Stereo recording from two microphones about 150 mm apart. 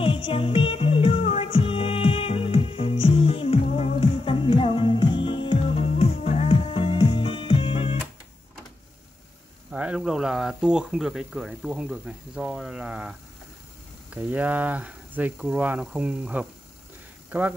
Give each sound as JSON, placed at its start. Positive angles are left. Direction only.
{"t": 0.0, "sound": "music", "side_deg": 35}
{"t": 9.7, "sound": "speech", "side_deg": -5}
{"t": 14.1, "sound": "speech", "side_deg": -10}